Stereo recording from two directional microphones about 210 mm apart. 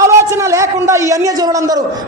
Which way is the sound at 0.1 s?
15° right (ahead or behind).